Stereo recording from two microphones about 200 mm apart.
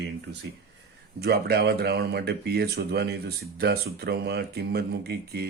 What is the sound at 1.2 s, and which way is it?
Speech, 50° right (ahead or behind).